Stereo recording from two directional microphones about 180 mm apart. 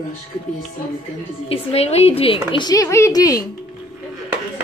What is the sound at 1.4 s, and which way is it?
Speech, 35° left (ahead or behind).